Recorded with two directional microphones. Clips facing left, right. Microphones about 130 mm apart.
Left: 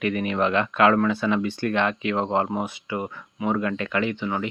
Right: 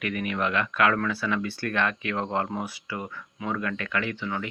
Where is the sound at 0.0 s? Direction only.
30° left (ahead or behind).